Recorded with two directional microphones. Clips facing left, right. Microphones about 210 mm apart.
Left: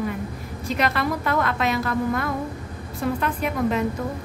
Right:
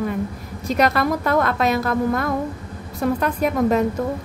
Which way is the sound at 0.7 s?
40° right (ahead or behind).